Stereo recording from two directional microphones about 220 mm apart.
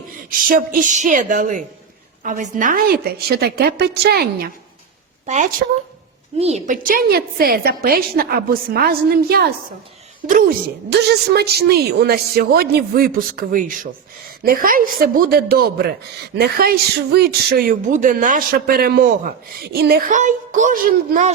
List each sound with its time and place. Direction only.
0.3 s a woman's voice: 40° right (ahead or behind)
5.2 s a woman's voice: 35° right (ahead or behind)